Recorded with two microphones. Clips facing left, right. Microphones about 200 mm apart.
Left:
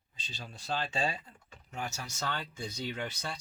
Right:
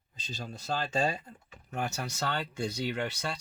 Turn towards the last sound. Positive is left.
turn(degrees=-65)  # may be behind; listen again after turning